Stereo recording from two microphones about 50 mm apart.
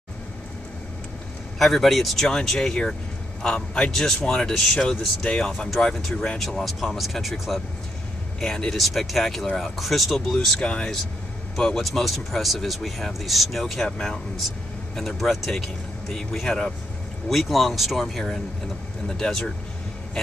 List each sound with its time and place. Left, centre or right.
1.6 s speech: centre
13.8 s speech: centre
15.0 s speech: centre